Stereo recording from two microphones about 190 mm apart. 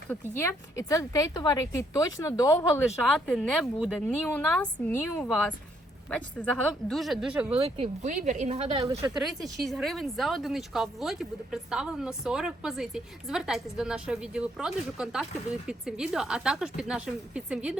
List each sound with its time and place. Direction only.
0.1 s speech: 10° left (ahead or behind)
3.2 s speech: 5° left (ahead or behind)
7.8 s a woman's voice: 40° right (ahead or behind)
9.0 s speech: 5° right (ahead or behind)